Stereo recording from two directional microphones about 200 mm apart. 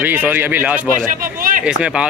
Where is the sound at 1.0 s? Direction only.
45° right (ahead or behind).